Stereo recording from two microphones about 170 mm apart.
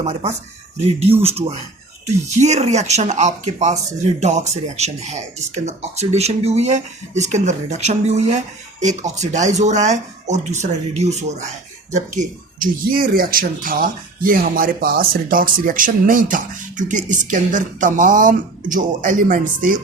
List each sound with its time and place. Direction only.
0.0 s speech: 40° right (ahead or behind)